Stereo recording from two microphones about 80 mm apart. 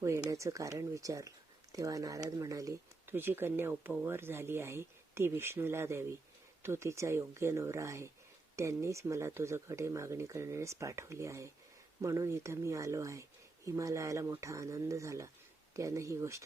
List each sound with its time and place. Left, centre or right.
0.3 s speech: right
3.1 s speech: right